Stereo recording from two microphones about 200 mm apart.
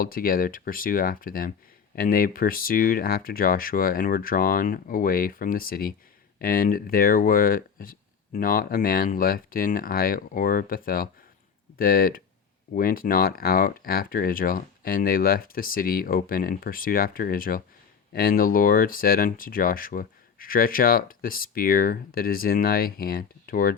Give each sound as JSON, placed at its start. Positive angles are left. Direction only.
{"t": 0.0, "sound": "speech", "side_deg": 45}